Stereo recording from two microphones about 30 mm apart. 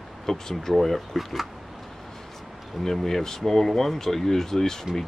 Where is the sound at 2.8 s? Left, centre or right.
Centre.